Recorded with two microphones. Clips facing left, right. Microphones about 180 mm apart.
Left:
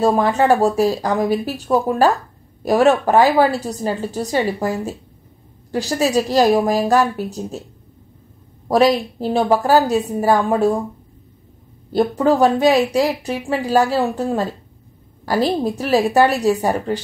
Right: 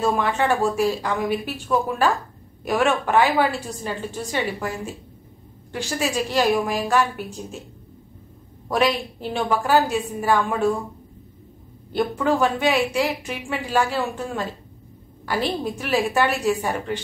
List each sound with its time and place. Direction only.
0.0 s a woman's voice: 35° left (ahead or behind)
8.6 s a woman's voice: 35° left (ahead or behind)
11.9 s a woman's voice: 35° left (ahead or behind)